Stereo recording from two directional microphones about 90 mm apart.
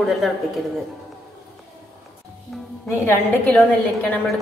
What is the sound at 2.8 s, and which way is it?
Speech, 25° left (ahead or behind).